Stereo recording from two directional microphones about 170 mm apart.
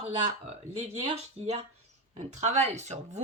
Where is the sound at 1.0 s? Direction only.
40° right (ahead or behind).